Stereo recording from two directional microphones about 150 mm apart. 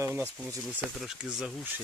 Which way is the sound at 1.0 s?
5° right (ahead or behind).